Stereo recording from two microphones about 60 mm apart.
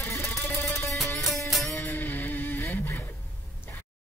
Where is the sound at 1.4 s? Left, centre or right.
Centre.